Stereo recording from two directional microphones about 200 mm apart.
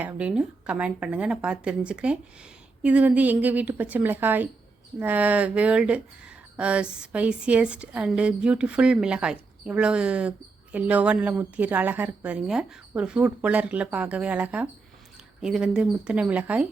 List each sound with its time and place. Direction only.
0.0 s a woman's voice: 5° right (ahead or behind)